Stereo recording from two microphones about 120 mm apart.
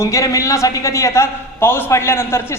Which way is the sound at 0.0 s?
25° left (ahead or behind).